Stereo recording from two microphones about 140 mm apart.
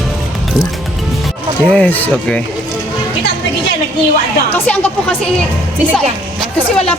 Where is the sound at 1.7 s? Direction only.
10° left (ahead or behind).